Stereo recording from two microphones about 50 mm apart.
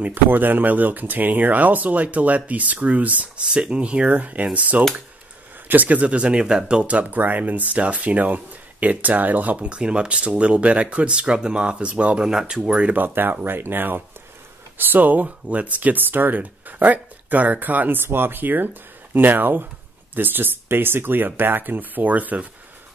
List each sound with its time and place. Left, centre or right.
0.0 s speech: right
3.4 s speech: centre; by 9.6 s right
9.6 s speech: right
12.3 s speech: centre
12.9 s speech: right